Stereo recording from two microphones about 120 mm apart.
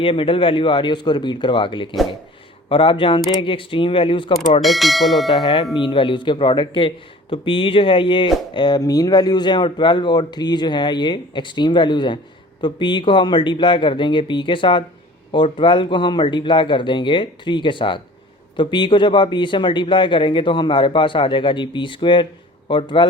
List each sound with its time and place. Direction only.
0.0 s speech: 50° left (ahead or behind)
4.6 s speech: centre (ahead or behind)
5.7 s speech: 45° left (ahead or behind)